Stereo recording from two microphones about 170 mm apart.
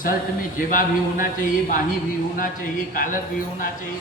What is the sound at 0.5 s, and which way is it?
Speech, 50° left (ahead or behind).